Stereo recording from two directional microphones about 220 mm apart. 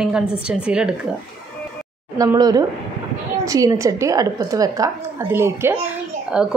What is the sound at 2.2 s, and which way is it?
A woman's voice, 15° right (ahead or behind).